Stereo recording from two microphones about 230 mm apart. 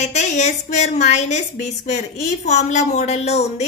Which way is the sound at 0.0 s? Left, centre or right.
Left.